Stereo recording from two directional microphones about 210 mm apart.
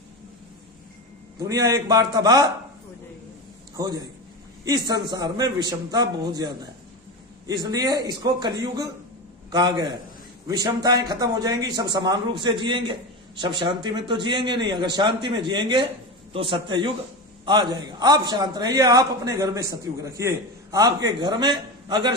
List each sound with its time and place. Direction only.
1.4 s a man's voice: 15° right (ahead or behind)
3.8 s a man's voice: 20° right (ahead or behind)
5.1 s a man's voice: 20° right (ahead or behind)